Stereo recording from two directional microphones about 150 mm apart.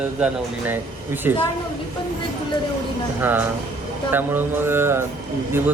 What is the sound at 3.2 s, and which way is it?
Speech, 15° right (ahead or behind).